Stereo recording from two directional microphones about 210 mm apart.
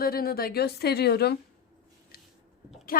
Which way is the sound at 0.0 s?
45° left (ahead or behind).